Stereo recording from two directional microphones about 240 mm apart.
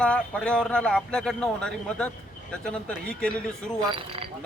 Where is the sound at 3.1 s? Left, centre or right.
Centre.